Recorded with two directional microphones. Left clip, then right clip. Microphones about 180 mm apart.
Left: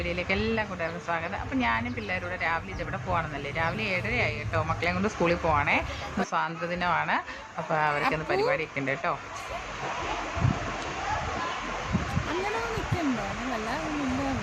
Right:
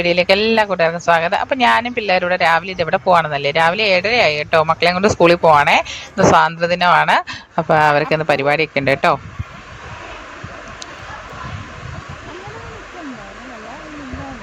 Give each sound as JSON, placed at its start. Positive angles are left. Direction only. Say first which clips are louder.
{"t": 0.0, "sound": "speech", "louder": "right 15 dB", "side_deg": -55}